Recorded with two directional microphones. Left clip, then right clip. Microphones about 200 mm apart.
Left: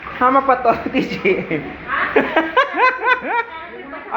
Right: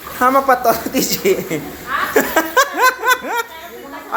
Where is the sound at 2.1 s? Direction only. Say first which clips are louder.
Right 1 dB; centre (ahead or behind).